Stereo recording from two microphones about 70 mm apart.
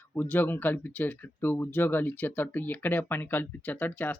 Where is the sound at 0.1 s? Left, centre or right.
Left.